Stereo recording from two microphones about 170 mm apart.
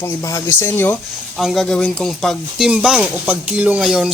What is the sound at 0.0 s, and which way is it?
Speech, 20° left (ahead or behind).